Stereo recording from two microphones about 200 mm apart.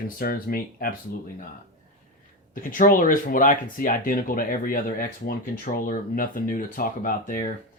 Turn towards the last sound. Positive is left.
turn(degrees=40)  # may be behind; listen again after turning